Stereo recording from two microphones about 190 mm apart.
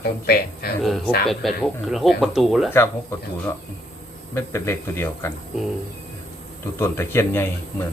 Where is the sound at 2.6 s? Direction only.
10° left (ahead or behind).